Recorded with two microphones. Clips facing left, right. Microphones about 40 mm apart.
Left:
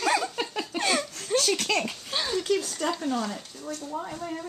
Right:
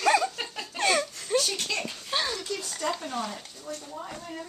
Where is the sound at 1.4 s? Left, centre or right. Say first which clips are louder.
Left 4 dB; left.